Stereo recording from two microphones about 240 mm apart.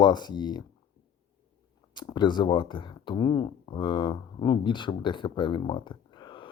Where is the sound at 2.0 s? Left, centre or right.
Centre.